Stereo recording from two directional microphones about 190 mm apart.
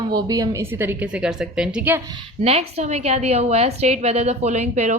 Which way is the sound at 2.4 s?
35° right (ahead or behind).